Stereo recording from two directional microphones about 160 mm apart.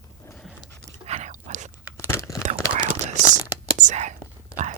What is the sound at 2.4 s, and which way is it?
Whispering, 50° right (ahead or behind).